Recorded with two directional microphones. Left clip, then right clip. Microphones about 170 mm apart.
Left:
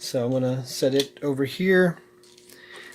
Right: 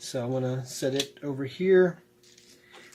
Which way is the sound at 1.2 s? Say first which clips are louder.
Left 4 dB; 55° left (ahead or behind).